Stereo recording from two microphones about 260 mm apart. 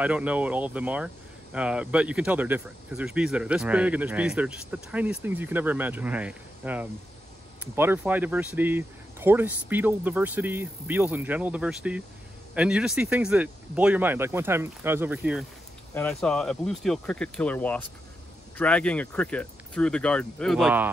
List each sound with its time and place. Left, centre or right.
0.0 s speech: centre